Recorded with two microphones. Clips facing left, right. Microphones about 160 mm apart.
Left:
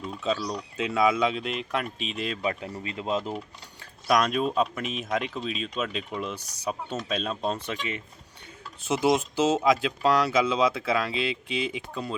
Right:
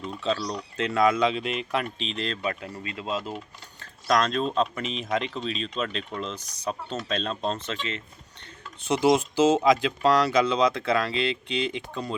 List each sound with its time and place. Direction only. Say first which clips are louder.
0.0 s speech: right 1 dB; 5° left (ahead or behind)
2.4 s speech: left 1 dB; 20° left (ahead or behind)
3.3 s speech: left 2 dB; 5° left (ahead or behind)
8.8 s speech: right 2 dB; centre (ahead or behind)